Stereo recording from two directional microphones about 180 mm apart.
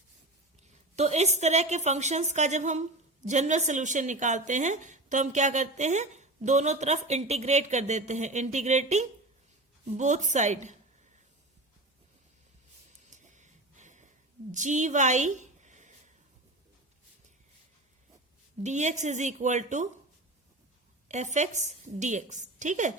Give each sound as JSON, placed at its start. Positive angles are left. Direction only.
{"t": 0.9, "sound": "speech", "side_deg": -40}
{"t": 13.1, "sound": "a sound", "side_deg": -40}
{"t": 14.5, "sound": "a woman's voice", "side_deg": -40}
{"t": 18.6, "sound": "speech", "side_deg": -40}
{"t": 21.1, "sound": "speech", "side_deg": -40}